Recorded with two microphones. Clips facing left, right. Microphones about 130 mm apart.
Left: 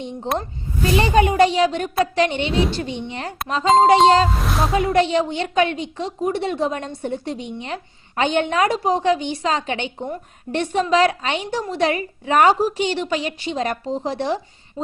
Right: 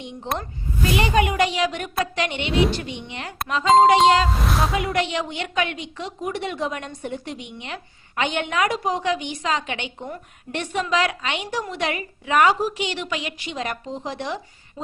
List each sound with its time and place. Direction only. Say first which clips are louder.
0.3 s a woman's voice: left 3 dB; 35° left (ahead or behind)
4.3 s speech: left 1 dB; centre (ahead or behind)
4.7 s a woman's voice: left 6 dB; 30° left (ahead or behind)